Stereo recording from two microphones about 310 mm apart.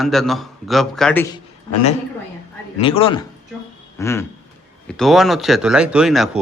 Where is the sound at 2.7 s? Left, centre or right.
Centre.